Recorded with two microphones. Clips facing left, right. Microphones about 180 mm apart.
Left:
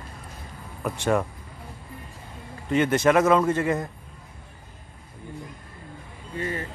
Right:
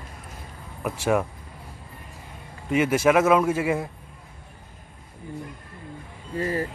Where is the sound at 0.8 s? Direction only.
5° right (ahead or behind).